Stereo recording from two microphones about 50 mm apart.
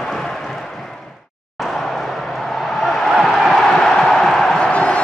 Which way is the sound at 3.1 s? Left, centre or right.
Centre.